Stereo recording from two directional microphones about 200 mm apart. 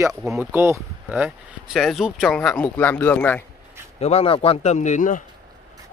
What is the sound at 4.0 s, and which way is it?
A man's voice, 30° left (ahead or behind).